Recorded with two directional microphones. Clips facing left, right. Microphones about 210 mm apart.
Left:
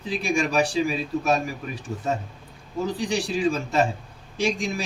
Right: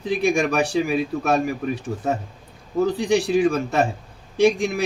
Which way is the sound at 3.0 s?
60° right (ahead or behind).